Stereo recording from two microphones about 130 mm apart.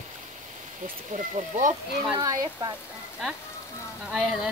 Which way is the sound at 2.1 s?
30° right (ahead or behind).